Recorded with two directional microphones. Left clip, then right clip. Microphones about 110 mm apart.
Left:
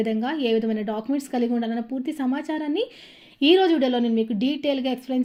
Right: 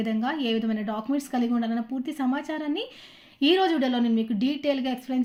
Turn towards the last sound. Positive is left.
turn(degrees=20)  # may be behind; listen again after turning